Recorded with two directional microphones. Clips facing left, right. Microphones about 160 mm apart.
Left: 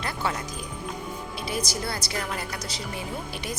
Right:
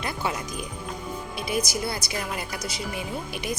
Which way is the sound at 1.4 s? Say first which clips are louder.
Right 3 dB; 15° right (ahead or behind).